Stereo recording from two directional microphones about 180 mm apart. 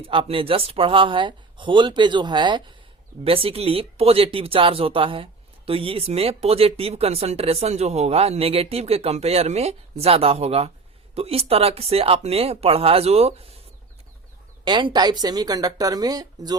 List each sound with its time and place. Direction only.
0.1 s speech: 30° right (ahead or behind)
14.6 s speech: 25° right (ahead or behind)